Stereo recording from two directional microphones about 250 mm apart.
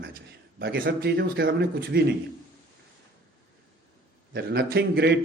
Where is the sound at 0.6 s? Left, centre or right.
Right.